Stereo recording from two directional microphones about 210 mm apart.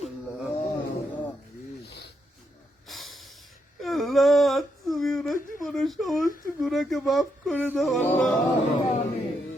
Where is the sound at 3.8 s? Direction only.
Centre (ahead or behind).